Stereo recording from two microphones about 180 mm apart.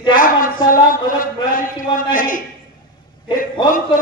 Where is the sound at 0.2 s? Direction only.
50° left (ahead or behind).